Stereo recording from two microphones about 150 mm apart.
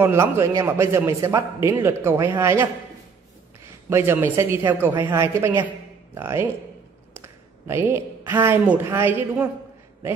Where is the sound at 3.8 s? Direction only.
15° right (ahead or behind).